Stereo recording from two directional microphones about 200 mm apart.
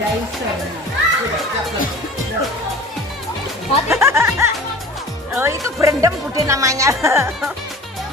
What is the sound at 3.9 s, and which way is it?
Speech, 15° right (ahead or behind).